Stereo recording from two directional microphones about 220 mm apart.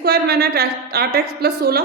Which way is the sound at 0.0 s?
45° right (ahead or behind).